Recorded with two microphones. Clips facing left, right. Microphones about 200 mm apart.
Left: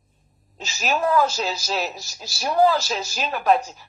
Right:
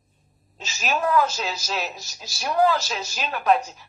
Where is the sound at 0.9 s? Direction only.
30° left (ahead or behind).